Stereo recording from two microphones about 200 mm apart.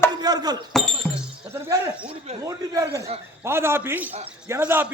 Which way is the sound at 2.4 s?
20° right (ahead or behind).